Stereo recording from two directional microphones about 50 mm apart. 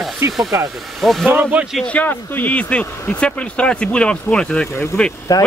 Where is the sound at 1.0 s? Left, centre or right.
Centre.